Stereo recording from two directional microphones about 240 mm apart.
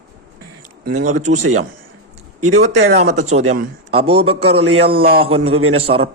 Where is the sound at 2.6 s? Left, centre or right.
Right.